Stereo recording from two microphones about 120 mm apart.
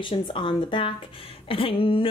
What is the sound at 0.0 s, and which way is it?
Speech, 45° left (ahead or behind).